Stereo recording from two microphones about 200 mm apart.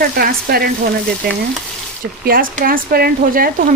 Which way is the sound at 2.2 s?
45° right (ahead or behind).